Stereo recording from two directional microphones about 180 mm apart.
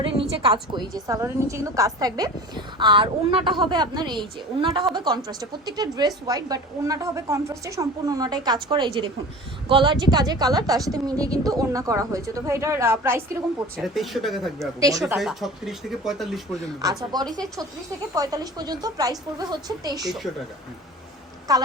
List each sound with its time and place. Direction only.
0.0 s a woman's voice: 30° right (ahead or behind); by 13.2 s 15° right (ahead or behind)
13.7 s speech: centre (ahead or behind)
14.8 s a woman's voice: 20° right (ahead or behind)
15.2 s speech: centre (ahead or behind)
17.0 s a woman's voice: 20° right (ahead or behind)
21.5 s a woman's voice: 20° right (ahead or behind)